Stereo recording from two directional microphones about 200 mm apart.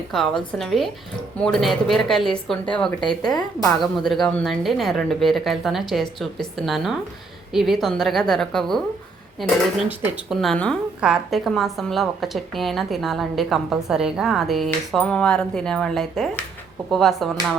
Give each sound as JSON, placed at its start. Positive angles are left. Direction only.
{"t": 0.1, "sound": "speech", "side_deg": 0}
{"t": 3.1, "sound": "speech", "side_deg": 20}
{"t": 3.8, "sound": "speech", "side_deg": 0}